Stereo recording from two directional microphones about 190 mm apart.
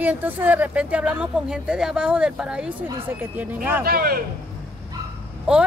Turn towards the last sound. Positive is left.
turn(degrees=-5)  # may be behind; listen again after turning